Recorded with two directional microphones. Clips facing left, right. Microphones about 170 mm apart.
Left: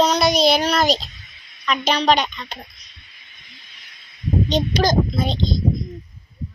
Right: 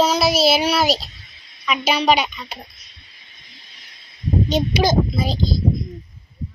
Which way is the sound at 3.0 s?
35° right (ahead or behind).